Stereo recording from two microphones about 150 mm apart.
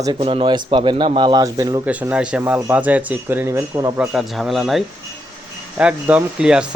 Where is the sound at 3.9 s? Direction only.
10° right (ahead or behind).